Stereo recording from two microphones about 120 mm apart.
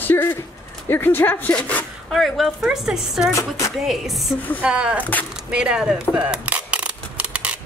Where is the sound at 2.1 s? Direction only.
Centre (ahead or behind).